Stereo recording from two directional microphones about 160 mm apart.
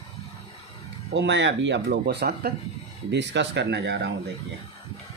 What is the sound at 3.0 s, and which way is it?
Speech, 90° right.